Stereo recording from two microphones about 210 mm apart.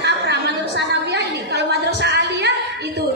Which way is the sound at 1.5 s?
55° right (ahead or behind).